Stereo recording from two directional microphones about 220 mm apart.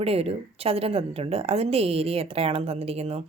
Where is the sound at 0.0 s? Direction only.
25° right (ahead or behind).